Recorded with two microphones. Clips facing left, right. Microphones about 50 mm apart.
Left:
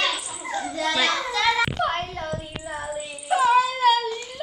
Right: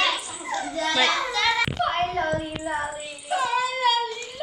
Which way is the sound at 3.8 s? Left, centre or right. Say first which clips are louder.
Left 3 dB; centre.